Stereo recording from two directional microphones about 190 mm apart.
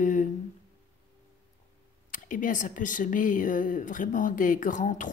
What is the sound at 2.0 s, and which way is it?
A woman's voice, 45° left (ahead or behind).